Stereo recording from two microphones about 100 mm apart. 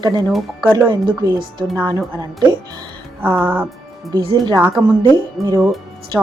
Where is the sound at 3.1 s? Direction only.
20° right (ahead or behind).